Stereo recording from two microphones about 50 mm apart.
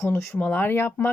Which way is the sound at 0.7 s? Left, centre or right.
Left.